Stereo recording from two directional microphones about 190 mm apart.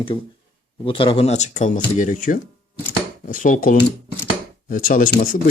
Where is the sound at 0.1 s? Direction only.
25° left (ahead or behind).